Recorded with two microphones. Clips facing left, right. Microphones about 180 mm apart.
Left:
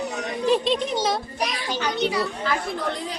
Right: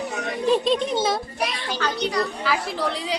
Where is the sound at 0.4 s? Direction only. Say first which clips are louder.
Right 1 dB; centre (ahead or behind).